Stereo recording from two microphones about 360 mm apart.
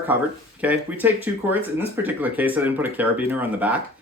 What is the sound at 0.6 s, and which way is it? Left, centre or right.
Speech, centre.